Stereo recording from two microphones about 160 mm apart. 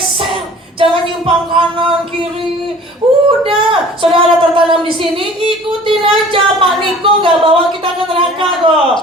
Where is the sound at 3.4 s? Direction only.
35° right (ahead or behind).